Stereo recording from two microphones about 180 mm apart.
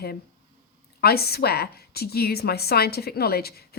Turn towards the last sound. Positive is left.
turn(degrees=60)  # may be behind; listen again after turning